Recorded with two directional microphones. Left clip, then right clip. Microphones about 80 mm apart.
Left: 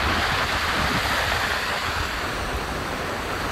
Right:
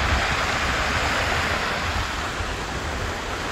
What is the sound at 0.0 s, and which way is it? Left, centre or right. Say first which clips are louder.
Vehicle: even; left.